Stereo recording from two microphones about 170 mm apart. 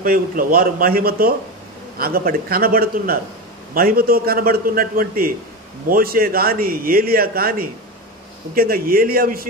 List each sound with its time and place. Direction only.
0.0 s a man's voice: 55° right (ahead or behind)